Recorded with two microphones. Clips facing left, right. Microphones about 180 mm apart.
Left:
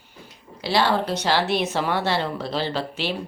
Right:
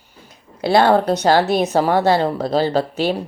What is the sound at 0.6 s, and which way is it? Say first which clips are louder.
Speech: right 8 dB; 50° right (ahead or behind).